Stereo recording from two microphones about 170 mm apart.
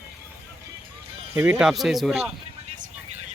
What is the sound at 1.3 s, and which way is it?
Speech, 15° right (ahead or behind).